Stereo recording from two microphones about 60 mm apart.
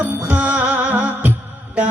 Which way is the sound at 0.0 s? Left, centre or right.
Right.